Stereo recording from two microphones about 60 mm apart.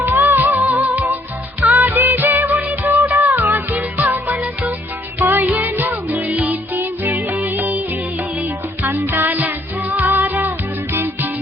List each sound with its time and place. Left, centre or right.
0.0 s music: right
5.2 s music: right